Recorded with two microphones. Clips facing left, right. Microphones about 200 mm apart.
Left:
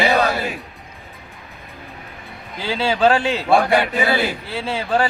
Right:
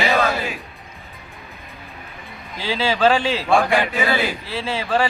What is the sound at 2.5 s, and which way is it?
Speech, centre (ahead or behind).